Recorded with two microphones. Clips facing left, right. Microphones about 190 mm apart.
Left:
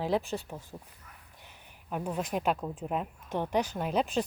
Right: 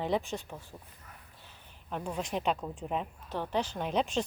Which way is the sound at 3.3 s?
15° left (ahead or behind).